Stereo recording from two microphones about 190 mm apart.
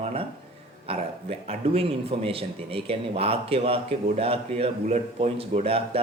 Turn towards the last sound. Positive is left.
turn(degrees=-30)  # may be behind; listen again after turning